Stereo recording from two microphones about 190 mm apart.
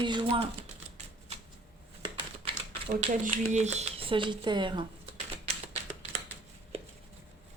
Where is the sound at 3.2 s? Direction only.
40° right (ahead or behind).